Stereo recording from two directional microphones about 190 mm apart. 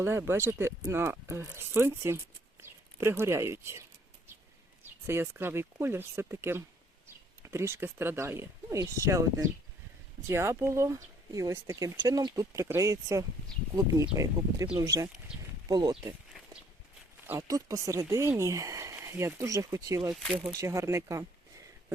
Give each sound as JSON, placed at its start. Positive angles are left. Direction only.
{"t": 0.0, "sound": "speech", "side_deg": -15}
{"t": 17.2, "sound": "speech", "side_deg": -15}